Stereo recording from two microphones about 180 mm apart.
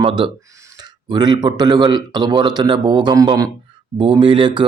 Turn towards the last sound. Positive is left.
turn(degrees=-25)  # may be behind; listen again after turning